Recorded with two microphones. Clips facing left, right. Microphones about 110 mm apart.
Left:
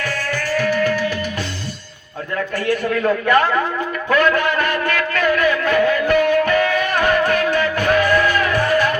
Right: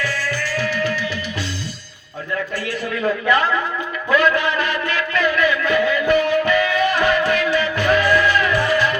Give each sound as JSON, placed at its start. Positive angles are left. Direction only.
{"t": 0.0, "sound": "music", "side_deg": 50}
{"t": 2.6, "sound": "a man's voice", "side_deg": 50}
{"t": 4.1, "sound": "a sound", "side_deg": 50}